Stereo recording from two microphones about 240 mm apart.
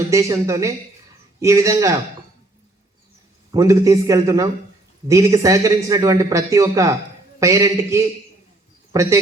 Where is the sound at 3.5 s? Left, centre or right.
Centre.